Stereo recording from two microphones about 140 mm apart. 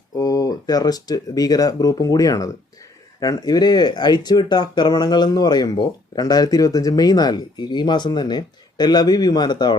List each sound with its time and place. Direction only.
0.2 s speech: 25° left (ahead or behind)